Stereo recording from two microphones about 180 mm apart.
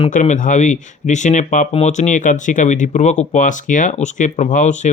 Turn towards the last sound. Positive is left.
turn(degrees=40)  # may be behind; listen again after turning